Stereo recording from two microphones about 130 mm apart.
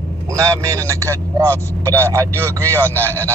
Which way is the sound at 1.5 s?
15° left (ahead or behind).